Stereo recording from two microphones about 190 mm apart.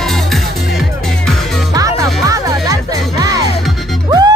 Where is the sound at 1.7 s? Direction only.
20° right (ahead or behind).